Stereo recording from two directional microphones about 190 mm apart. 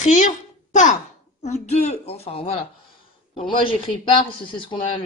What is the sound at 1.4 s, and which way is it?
A woman's voice, 35° left (ahead or behind).